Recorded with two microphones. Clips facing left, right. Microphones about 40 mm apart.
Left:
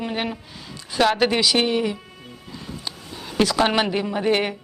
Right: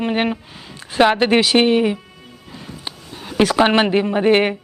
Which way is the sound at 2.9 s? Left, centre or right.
Right.